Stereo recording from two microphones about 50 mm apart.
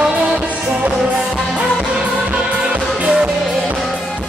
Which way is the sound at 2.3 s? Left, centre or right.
Right.